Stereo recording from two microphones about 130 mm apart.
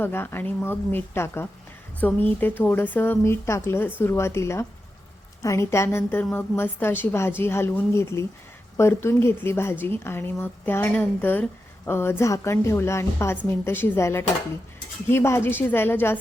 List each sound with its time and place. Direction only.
0.0 s a woman's voice: 15° left (ahead or behind)